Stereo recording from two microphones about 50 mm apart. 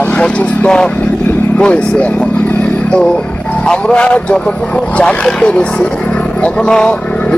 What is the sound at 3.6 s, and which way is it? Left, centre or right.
A man's voice, centre.